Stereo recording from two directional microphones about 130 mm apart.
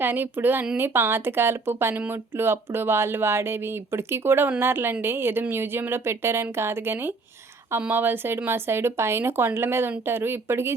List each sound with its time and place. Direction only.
0.0 s speech: 15° right (ahead or behind)